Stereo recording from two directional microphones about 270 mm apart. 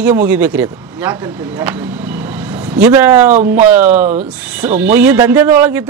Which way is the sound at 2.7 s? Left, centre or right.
Centre.